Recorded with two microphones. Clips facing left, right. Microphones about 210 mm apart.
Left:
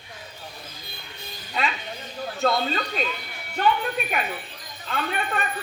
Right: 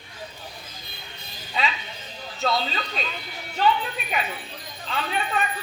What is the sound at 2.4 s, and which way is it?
A man's voice, 55° left (ahead or behind).